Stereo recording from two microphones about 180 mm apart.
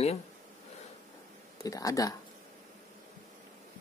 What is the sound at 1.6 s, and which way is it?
Speech, 20° left (ahead or behind).